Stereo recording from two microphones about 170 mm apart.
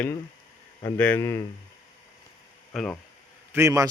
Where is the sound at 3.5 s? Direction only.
20° right (ahead or behind).